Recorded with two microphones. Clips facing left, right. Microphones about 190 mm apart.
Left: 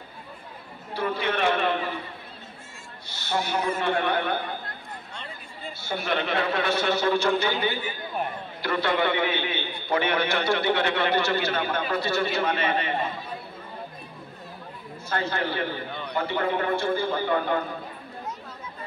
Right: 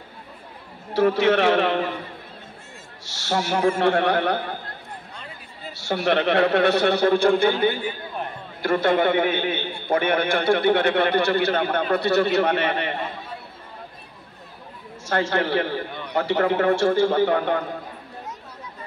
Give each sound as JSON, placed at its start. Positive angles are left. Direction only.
{"t": 0.9, "sound": "a man's voice", "side_deg": -75}
{"t": 3.1, "sound": "a man's voice", "side_deg": -80}
{"t": 5.8, "sound": "a man's voice", "side_deg": -75}
{"t": 15.0, "sound": "a man's voice", "side_deg": -75}